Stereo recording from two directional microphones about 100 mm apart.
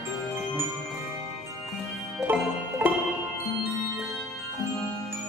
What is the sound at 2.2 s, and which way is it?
Music, 15° right (ahead or behind).